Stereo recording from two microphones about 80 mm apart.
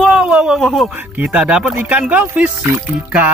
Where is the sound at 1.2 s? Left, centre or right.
Centre.